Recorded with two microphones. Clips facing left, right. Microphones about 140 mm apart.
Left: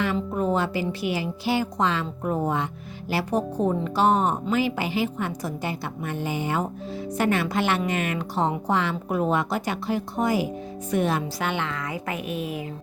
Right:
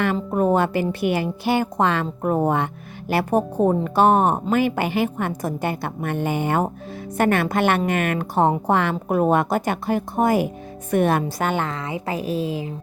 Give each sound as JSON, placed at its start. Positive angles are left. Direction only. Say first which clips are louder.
{"t": 0.0, "sound": "a woman's voice", "louder": "right 4 dB", "side_deg": -50}
{"t": 11.8, "sound": "a woman's voice", "louder": "right 4 dB", "side_deg": -30}